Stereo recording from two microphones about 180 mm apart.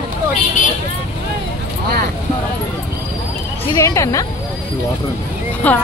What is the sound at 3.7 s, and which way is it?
Speech, 15° left (ahead or behind).